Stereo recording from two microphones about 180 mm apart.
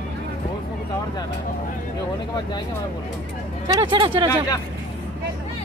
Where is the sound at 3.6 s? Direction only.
25° right (ahead or behind).